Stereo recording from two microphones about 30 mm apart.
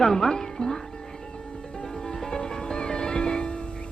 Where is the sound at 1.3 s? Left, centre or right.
Left.